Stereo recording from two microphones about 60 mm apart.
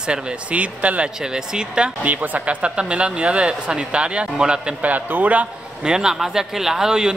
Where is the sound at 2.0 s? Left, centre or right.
Right.